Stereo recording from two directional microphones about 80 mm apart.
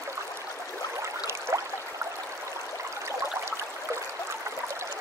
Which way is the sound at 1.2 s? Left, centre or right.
Right.